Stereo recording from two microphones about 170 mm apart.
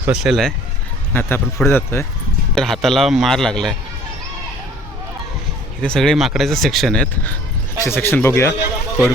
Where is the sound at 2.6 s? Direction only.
Centre (ahead or behind).